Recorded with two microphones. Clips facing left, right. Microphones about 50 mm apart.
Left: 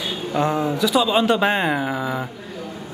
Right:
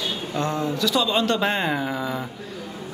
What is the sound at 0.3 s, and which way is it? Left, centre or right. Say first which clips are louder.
Speech: left 6 dB; centre.